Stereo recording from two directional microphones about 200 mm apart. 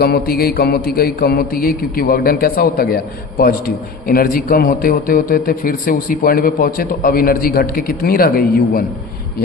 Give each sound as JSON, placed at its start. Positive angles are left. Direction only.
{"t": 0.0, "sound": "a man's voice", "side_deg": 50}